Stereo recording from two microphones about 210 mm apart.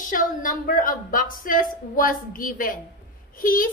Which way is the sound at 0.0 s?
40° left (ahead or behind).